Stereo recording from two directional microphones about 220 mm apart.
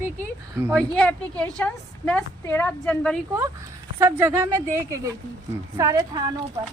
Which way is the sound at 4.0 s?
10° right (ahead or behind).